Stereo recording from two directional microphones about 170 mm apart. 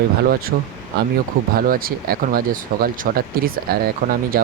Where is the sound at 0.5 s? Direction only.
65° right (ahead or behind).